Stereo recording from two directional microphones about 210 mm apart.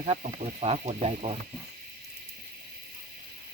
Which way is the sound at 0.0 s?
30° right (ahead or behind).